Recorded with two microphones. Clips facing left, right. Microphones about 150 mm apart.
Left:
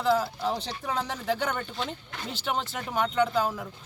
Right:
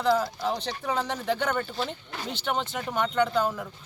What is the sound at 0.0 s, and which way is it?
Speech, 5° left (ahead or behind).